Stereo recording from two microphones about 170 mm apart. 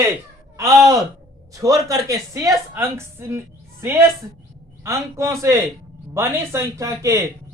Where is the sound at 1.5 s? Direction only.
20° right (ahead or behind).